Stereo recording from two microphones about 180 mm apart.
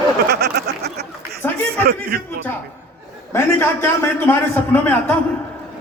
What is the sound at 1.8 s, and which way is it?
Speech, 60° right (ahead or behind).